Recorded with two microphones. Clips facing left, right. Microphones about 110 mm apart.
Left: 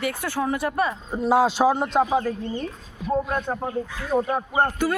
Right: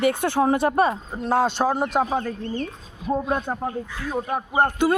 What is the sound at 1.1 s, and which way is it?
A man's voice, 5° left (ahead or behind).